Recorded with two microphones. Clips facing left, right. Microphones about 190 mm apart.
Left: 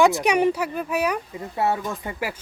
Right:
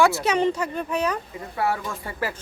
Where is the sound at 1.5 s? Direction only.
25° left (ahead or behind).